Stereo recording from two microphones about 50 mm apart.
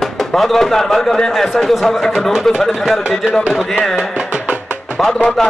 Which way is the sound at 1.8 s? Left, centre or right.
Centre.